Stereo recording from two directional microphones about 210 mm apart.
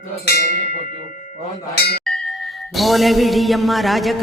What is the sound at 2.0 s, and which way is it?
Music, centre (ahead or behind).